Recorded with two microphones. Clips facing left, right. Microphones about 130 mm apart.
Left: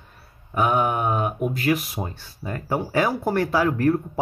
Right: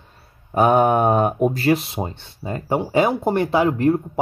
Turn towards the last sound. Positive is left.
turn(degrees=-20)  # may be behind; listen again after turning